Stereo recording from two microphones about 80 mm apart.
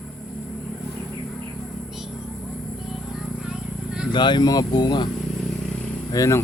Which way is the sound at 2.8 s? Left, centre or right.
Centre.